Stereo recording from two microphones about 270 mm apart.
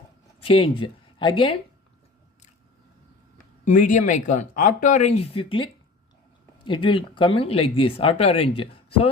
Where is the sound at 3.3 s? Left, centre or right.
Left.